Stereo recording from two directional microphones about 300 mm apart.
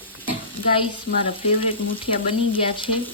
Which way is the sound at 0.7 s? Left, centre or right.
Centre.